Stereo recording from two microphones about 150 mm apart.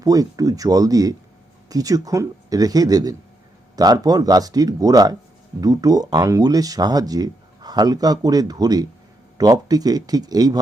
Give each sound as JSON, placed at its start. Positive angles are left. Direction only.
{"t": 0.0, "sound": "speech", "side_deg": -25}